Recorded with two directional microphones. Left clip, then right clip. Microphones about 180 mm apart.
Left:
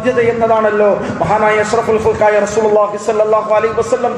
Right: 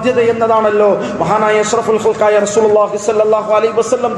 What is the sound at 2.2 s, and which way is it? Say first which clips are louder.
Speech: right 1 dB; 45° right (ahead or behind).